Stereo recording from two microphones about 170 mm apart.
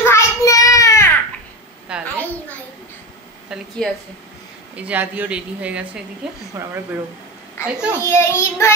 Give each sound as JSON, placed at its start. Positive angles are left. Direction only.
{"t": 0.0, "sound": "child singing", "side_deg": 15}
{"t": 1.9, "sound": "a sound", "side_deg": -5}
{"t": 3.4, "sound": "speech", "side_deg": -5}
{"t": 7.6, "sound": "a child's voice", "side_deg": 15}